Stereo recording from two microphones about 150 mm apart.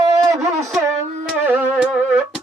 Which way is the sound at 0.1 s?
20° right (ahead or behind).